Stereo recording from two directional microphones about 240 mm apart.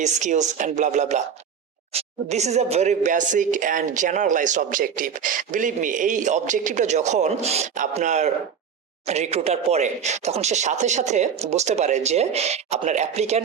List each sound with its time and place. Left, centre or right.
0.0 s a woman's voice: right